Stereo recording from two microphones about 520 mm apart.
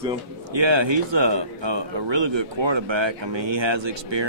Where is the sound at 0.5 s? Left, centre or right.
Right.